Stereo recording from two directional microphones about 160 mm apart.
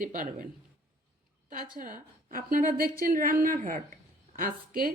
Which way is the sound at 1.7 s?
60° right (ahead or behind).